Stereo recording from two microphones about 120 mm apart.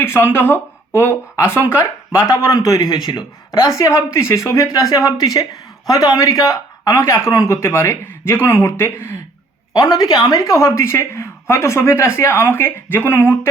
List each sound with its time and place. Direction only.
0.0 s a woman's voice: 20° left (ahead or behind); by 3.7 s 35° left (ahead or behind)
3.7 s a woman's voice: 25° left (ahead or behind)
9.7 s a woman's voice: 35° left (ahead or behind)